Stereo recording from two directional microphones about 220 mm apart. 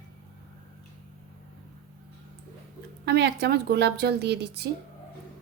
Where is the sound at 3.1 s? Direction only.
50° right (ahead or behind).